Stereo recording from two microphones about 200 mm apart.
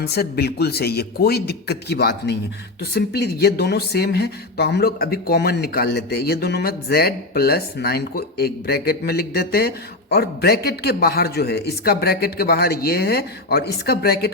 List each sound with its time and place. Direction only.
0.0 s speech: 50° left (ahead or behind)